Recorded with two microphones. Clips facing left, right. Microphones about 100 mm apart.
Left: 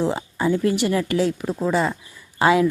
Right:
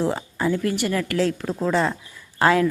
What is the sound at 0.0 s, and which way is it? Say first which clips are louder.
Speech: left 1 dB; 15° left (ahead or behind).